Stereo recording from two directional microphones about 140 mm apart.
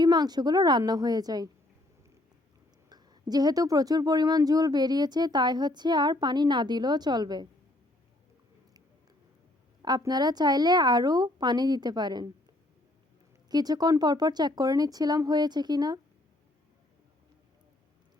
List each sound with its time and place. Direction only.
0.0 s speech: 30° right (ahead or behind)
2.9 s speech: 30° right (ahead or behind)
9.8 s speech: 30° right (ahead or behind)
13.5 s speech: 30° right (ahead or behind)